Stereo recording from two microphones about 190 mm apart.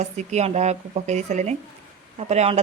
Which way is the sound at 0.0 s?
35° right (ahead or behind).